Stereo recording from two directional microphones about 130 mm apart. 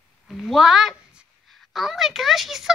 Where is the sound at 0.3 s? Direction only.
Centre (ahead or behind).